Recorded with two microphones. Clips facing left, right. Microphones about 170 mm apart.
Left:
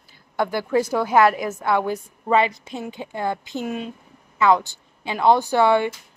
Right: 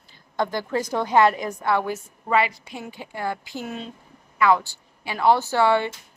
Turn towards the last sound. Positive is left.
turn(degrees=15)  # may be behind; listen again after turning